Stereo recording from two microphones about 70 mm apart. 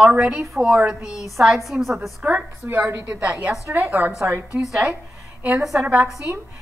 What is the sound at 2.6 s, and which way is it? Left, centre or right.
A woman's voice, right.